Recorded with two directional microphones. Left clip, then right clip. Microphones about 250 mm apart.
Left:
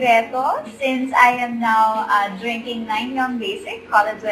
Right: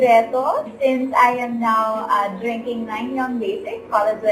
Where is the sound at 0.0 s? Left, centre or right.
Centre.